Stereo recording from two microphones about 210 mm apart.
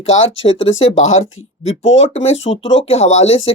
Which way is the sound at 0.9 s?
35° left (ahead or behind).